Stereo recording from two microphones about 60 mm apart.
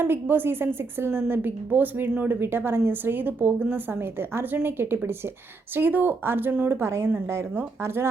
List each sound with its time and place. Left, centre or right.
0.0 s a woman's voice: right